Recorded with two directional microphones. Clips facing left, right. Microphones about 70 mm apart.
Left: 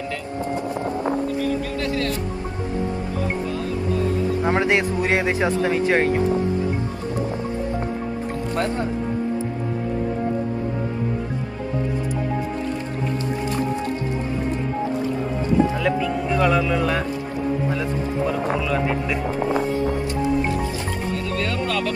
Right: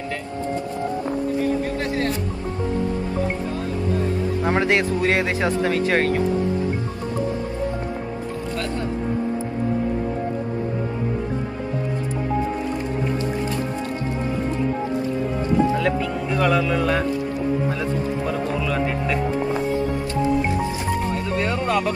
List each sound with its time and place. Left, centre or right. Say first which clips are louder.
4.5 s speech: right 1 dB; left
16.3 s music: even; centre
16.6 s speech: right 1 dB; centre
18.7 s speech: even; centre
21.4 s speech: right 3 dB; right